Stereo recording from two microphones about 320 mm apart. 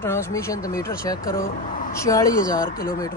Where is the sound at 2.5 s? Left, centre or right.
Left.